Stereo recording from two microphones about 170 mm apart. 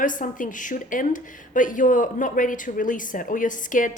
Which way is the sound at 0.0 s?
50° left (ahead or behind).